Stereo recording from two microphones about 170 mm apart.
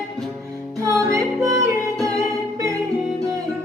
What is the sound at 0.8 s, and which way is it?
Music, 20° right (ahead or behind).